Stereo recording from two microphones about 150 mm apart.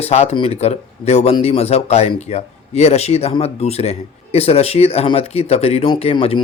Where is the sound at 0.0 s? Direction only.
45° left (ahead or behind).